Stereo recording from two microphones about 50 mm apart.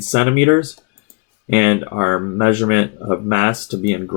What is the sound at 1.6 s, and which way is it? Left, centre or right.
Speech, right.